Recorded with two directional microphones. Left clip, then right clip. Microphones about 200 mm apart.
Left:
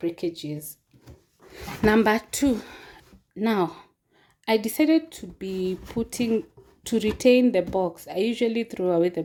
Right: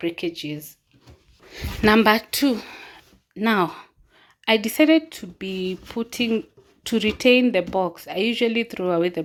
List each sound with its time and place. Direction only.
0.0 s speech: centre (ahead or behind)